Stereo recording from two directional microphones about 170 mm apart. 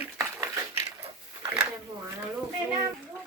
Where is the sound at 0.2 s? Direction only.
15° right (ahead or behind).